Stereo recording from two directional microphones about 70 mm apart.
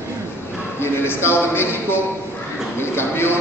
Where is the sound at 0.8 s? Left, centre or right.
Left.